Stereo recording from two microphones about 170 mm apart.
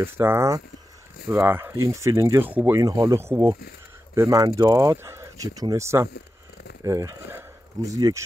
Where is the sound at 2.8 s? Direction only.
20° right (ahead or behind).